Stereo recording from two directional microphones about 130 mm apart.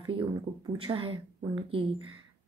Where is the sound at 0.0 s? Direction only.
45° right (ahead or behind).